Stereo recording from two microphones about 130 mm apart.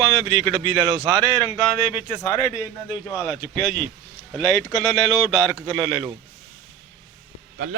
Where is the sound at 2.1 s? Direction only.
20° left (ahead or behind).